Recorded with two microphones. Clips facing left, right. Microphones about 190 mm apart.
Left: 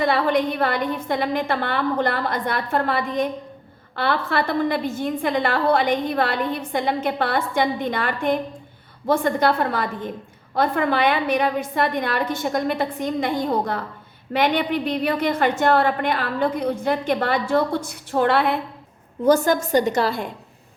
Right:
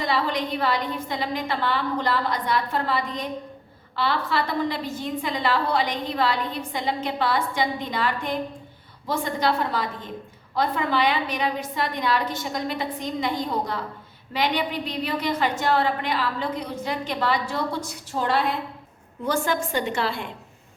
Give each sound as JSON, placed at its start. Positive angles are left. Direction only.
{"t": 0.0, "sound": "a woman's voice", "side_deg": 55}
{"t": 19.2, "sound": "a woman's voice", "side_deg": 40}